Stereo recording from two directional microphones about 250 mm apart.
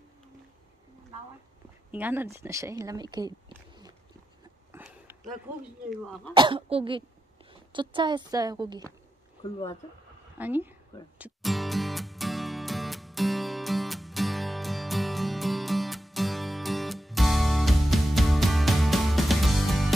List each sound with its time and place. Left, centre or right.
1.9 s speech: centre
4.8 s a sound: centre
5.9 s speech: centre
6.3 s a woman's voice: centre
9.4 s speech: centre
10.4 s a woman's voice: centre
11.1 s music: centre